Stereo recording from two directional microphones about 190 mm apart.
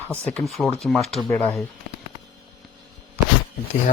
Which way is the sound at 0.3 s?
5° left (ahead or behind).